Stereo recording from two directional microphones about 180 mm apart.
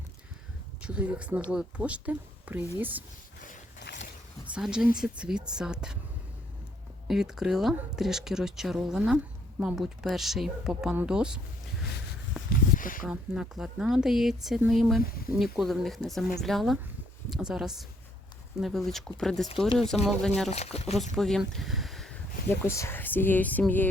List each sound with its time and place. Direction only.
0.8 s speech: 5° right (ahead or behind)
3.4 s a sound: 50° left (ahead or behind)
4.5 s speech: 5° right (ahead or behind)
7.1 s speech: 5° right (ahead or behind)
12.5 s a sound: 50° left (ahead or behind)
13.1 s speech: 5° right (ahead or behind)
20.5 s speech: 35° left (ahead or behind)
21.2 s speech: centre (ahead or behind)